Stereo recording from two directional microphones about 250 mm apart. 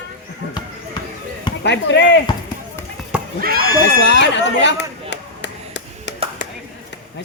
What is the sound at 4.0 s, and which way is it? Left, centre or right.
Chatter, left.